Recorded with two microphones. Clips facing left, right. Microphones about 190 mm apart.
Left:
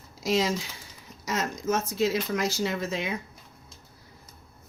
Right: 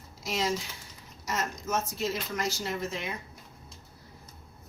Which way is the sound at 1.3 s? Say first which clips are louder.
Left 4 dB; 90° left.